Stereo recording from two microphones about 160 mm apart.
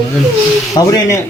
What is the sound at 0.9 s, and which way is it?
Speech, 20° left (ahead or behind).